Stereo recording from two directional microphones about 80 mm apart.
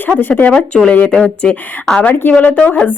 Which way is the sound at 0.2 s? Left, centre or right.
Left.